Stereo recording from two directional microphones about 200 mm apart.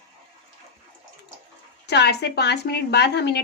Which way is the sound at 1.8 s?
55° left (ahead or behind).